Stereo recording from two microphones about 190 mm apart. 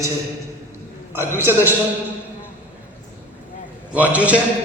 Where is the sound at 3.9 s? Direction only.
5° right (ahead or behind).